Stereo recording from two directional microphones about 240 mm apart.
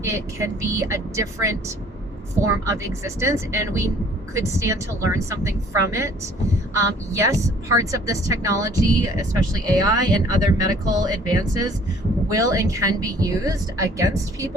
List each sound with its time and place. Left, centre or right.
0.0 s speech: centre
7.7 s speech: centre